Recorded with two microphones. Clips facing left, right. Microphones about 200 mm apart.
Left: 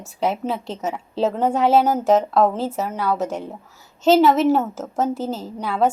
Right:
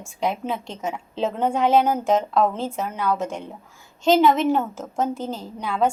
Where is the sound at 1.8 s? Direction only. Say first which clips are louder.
Left 3 dB; 40° left (ahead or behind).